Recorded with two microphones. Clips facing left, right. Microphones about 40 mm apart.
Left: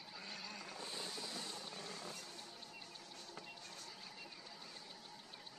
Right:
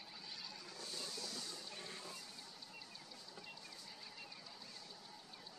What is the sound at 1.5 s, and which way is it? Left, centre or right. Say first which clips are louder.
Music: left 2 dB; left.